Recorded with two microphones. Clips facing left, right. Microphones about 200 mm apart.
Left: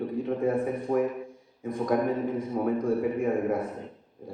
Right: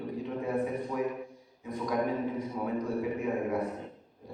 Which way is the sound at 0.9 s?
50° left (ahead or behind).